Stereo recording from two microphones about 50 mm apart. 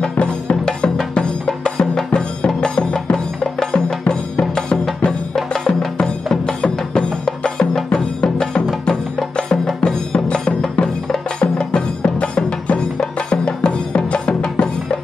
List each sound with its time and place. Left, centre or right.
0.0 s music: centre